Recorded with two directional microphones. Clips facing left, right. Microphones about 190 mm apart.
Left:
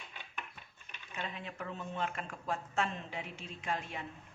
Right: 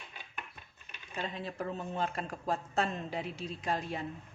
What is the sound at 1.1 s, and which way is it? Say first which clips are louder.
Speech: right 4 dB; 35° right (ahead or behind).